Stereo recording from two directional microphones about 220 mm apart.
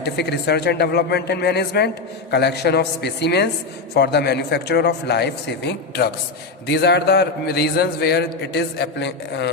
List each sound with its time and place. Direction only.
0.0 s a man's voice: 50° left (ahead or behind)